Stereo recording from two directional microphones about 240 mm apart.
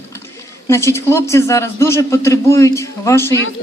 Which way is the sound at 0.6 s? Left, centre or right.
Centre.